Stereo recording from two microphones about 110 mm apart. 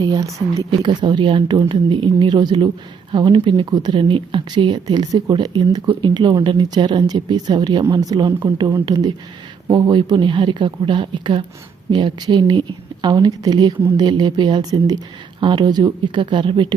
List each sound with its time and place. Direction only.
0.0 s speech: 35° right (ahead or behind)
0.7 s a woman's voice: 45° right (ahead or behind)